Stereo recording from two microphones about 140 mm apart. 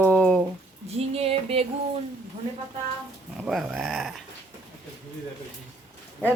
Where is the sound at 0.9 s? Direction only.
45° right (ahead or behind).